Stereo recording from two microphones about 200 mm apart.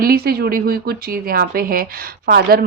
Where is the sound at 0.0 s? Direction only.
50° right (ahead or behind).